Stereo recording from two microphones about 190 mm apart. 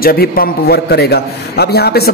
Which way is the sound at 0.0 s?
50° left (ahead or behind).